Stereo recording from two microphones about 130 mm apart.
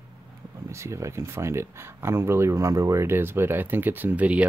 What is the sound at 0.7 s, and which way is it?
Speech, 20° right (ahead or behind).